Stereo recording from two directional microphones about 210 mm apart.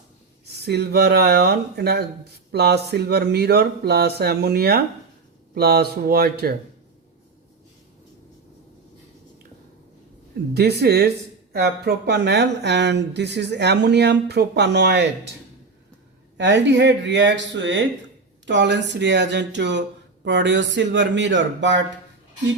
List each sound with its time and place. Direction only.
0.4 s speech: 50° right (ahead or behind)
10.5 s speech: 50° right (ahead or behind)
16.4 s speech: 60° right (ahead or behind)